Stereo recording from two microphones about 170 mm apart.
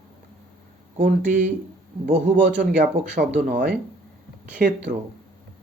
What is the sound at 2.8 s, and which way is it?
Speech, 75° right (ahead or behind).